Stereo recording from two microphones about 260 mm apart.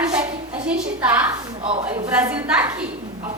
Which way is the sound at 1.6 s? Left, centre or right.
Right.